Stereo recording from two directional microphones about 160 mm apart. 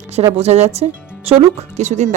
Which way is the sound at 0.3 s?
40° right (ahead or behind).